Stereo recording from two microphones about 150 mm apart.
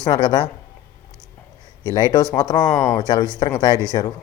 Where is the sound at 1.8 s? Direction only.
25° left (ahead or behind).